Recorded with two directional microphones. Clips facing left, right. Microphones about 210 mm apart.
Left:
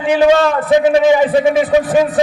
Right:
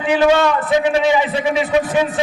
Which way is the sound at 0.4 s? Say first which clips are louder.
Left 4 dB; 45° left (ahead or behind).